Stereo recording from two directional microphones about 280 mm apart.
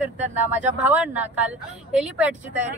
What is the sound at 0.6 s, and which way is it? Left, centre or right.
Speech, centre.